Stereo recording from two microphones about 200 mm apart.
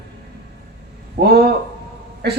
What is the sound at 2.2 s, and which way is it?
Speech, 55° right (ahead or behind).